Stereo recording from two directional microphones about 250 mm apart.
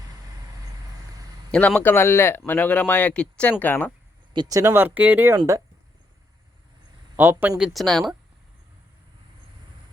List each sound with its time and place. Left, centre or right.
1.5 s speech: centre
4.4 s speech: centre
7.2 s speech: centre